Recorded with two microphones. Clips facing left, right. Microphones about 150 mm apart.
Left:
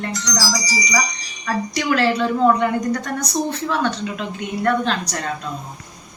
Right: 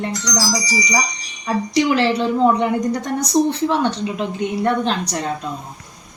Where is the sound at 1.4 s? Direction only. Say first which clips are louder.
Right 5 dB; 20° right (ahead or behind).